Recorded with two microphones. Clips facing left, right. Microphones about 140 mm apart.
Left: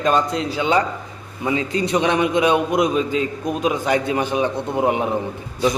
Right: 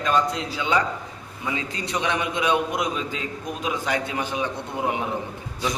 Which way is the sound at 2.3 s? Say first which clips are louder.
Left 6 dB; 15° left (ahead or behind).